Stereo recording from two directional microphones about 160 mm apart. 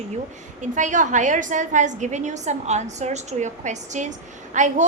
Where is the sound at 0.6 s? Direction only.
50° right (ahead or behind).